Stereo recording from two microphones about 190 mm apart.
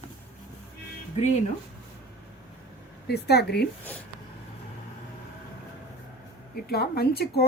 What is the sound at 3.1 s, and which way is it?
Speech, 60° left (ahead or behind).